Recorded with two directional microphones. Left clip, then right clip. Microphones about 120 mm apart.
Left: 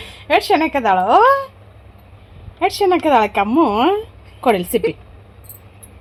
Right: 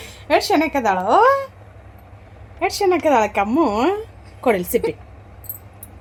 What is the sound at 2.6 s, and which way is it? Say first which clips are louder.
A woman's voice: left 2 dB; 90° left.